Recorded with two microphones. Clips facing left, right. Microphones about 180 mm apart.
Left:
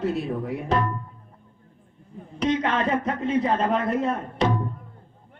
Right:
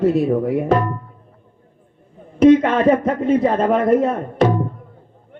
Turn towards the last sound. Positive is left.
turn(degrees=-50)  # may be behind; listen again after turning